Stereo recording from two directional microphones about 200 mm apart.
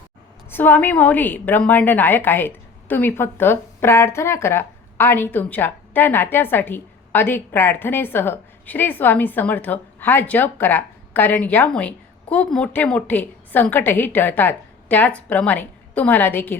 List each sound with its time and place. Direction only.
0.5 s a woman's voice: 10° left (ahead or behind)